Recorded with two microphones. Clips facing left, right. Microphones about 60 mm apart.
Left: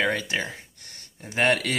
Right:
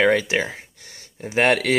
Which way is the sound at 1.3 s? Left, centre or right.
Right.